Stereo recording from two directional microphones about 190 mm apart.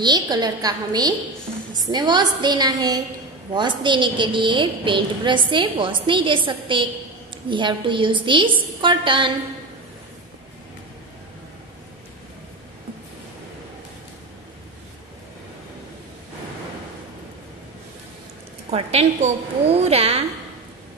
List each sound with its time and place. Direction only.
0.0 s a woman's voice: 20° right (ahead or behind)
18.7 s a woman's voice: 35° right (ahead or behind)